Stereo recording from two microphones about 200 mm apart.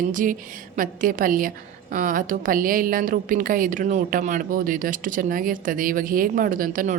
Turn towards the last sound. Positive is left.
turn(degrees=-40)  # may be behind; listen again after turning